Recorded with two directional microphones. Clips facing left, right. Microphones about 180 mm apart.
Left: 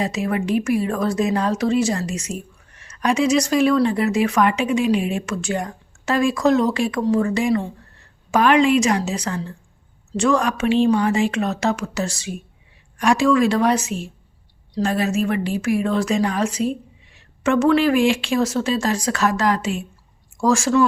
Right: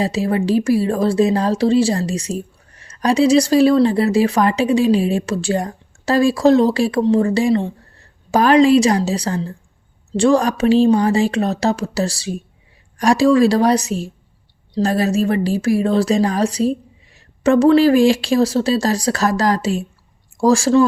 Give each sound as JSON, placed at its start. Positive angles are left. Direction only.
{"t": 0.0, "sound": "speech", "side_deg": -30}